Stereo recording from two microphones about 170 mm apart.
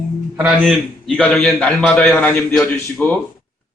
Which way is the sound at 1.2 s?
10° left (ahead or behind).